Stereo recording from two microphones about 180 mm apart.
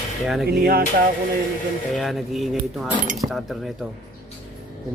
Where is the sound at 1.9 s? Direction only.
Centre (ahead or behind).